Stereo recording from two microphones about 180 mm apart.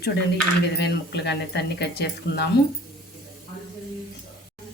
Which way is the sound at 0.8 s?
70° left (ahead or behind).